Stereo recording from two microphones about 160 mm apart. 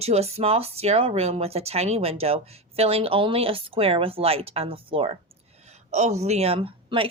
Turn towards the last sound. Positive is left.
turn(degrees=-35)  # may be behind; listen again after turning